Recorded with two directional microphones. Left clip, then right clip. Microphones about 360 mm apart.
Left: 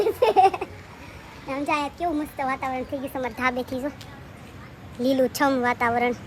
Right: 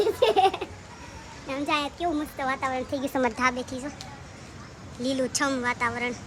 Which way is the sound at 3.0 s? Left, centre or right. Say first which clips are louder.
Right 3 dB; centre.